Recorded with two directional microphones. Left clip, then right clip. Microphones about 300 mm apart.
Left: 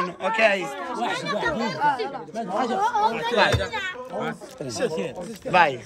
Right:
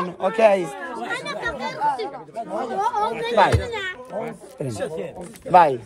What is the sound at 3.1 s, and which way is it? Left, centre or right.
Speech, centre.